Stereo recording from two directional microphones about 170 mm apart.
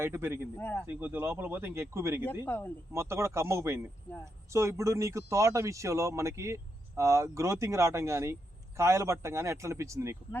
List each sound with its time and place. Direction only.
0.0 s speech: 15° right (ahead or behind)
0.5 s speech: 10° left (ahead or behind)
0.9 s speech: 10° right (ahead or behind)
2.4 s speech: 10° left (ahead or behind)
2.9 s speech: 15° right (ahead or behind)